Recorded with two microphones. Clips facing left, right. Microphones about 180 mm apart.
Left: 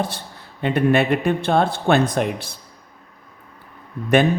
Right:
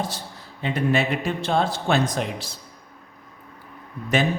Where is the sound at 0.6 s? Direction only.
60° left (ahead or behind).